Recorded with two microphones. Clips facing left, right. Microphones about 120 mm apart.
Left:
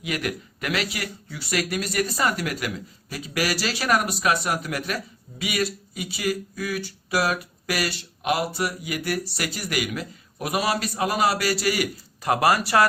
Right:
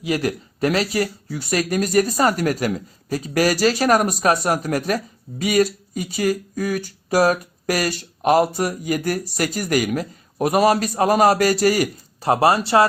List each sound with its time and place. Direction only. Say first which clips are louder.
0.0 s speech: right 6 dB; 30° right (ahead or behind)